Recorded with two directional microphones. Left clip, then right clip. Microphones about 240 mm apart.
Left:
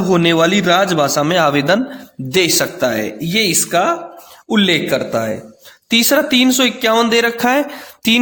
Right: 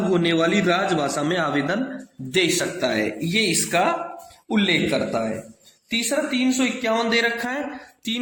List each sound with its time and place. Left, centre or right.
0.1 s a man's voice: left